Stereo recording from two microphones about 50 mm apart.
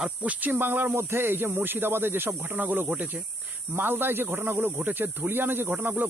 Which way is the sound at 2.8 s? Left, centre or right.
Right.